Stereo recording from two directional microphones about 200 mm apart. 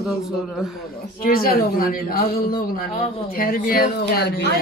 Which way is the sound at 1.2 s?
45° left (ahead or behind).